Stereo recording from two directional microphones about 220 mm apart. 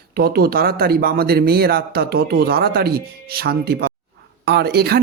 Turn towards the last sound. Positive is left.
turn(degrees=-45)  # may be behind; listen again after turning